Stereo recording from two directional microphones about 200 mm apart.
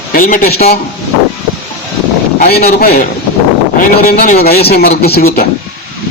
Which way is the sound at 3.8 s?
45° left (ahead or behind).